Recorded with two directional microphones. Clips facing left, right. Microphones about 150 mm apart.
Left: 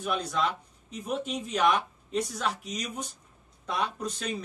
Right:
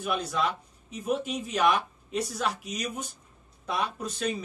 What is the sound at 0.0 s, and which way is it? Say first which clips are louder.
Speech: even; 5° right (ahead or behind).